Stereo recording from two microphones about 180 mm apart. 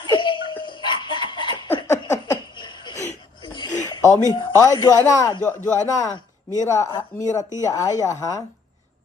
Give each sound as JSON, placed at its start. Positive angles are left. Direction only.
{"t": 0.0, "sound": "laughter", "side_deg": 25}
{"t": 3.4, "sound": "a sound", "side_deg": 25}
{"t": 4.3, "sound": "a woman's voice", "side_deg": 20}